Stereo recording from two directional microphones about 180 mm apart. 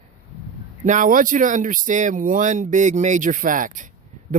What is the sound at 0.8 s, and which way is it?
Speech, 45° right (ahead or behind).